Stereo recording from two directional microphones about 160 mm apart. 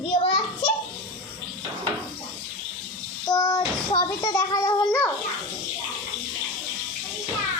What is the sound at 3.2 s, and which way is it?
Child singing, 20° left (ahead or behind).